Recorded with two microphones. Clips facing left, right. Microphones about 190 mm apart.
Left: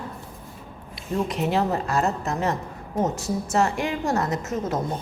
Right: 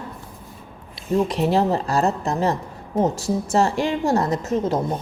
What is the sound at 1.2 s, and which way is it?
A woman's voice, 30° right (ahead or behind).